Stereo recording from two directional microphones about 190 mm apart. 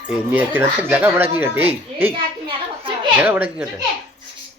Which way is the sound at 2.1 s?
25° right (ahead or behind).